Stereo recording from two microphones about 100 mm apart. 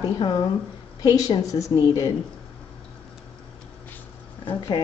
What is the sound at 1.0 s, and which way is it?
A woman's voice, 40° left (ahead or behind).